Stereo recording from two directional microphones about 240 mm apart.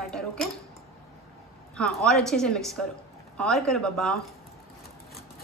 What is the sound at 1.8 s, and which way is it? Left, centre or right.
Speech, centre.